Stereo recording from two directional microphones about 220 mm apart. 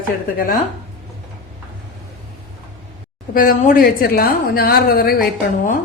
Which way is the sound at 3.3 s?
40° left (ahead or behind).